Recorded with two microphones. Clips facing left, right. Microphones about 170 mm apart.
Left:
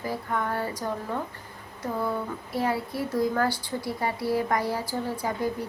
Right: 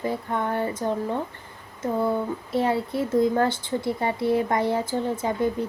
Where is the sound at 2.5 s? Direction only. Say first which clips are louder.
Right 4 dB; 25° right (ahead or behind).